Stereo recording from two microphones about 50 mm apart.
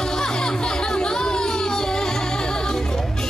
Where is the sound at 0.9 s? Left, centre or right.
Centre.